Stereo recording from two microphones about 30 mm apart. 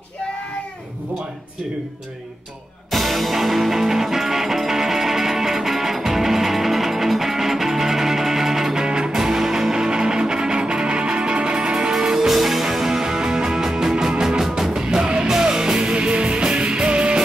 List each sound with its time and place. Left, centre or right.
2.9 s music: centre
8.7 s music: right
9.1 s music: centre
11.9 s music: centre
12.3 s music: centre
13.9 s music: right